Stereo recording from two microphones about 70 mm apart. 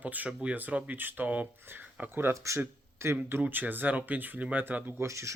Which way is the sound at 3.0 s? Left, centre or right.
Right.